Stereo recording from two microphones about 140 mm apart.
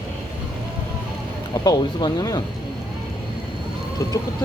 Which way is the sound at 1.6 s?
30° left (ahead or behind).